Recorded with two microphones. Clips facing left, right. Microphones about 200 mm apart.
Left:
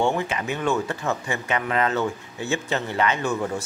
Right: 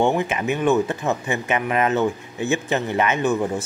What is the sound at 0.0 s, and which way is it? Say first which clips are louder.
Speech: right 3 dB; 20° right (ahead or behind).